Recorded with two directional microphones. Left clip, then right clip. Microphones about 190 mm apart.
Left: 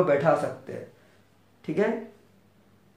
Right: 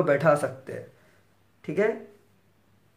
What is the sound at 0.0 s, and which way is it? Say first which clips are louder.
Speech: even; 35° right (ahead or behind).